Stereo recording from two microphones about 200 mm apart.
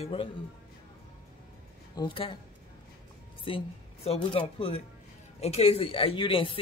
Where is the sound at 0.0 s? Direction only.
25° left (ahead or behind).